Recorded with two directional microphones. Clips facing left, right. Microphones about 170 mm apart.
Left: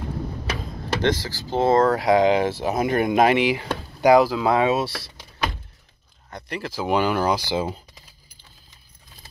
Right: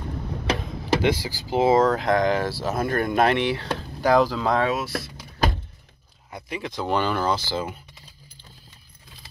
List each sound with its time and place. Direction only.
1.0 s speech: 15° right (ahead or behind)
1.9 s speech: 10° left (ahead or behind)
4.6 s speech: 30° left (ahead or behind)
6.3 s speech: centre (ahead or behind)